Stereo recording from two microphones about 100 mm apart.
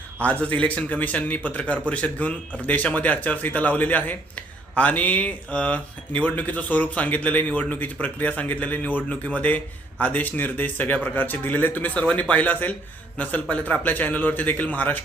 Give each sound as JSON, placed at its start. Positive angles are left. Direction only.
{"t": 0.2, "sound": "a man's voice", "side_deg": 15}